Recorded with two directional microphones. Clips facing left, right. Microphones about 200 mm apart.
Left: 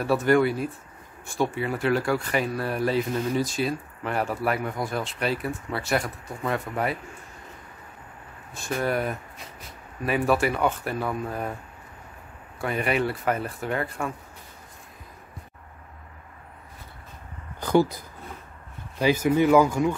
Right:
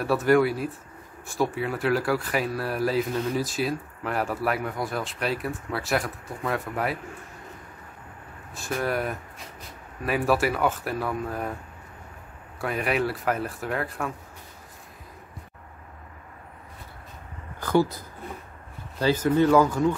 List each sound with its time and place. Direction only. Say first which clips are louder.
0.0 s speech: even; centre (ahead or behind)
8.5 s speech: left 1 dB; centre (ahead or behind)
12.5 s speech: left 1 dB; centre (ahead or behind)
17.6 s speech: left 1 dB; 15° left (ahead or behind)